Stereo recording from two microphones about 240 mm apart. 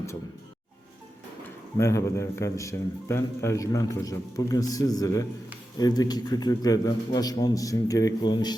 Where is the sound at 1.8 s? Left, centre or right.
Centre.